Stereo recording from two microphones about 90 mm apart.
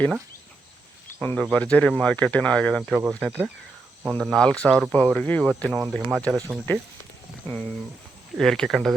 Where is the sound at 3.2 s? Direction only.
15° right (ahead or behind).